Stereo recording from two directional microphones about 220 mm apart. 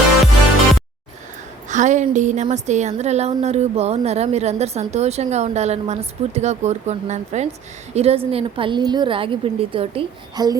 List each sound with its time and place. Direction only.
1.7 s a woman's voice: 35° right (ahead or behind); by 10.6 s 20° right (ahead or behind)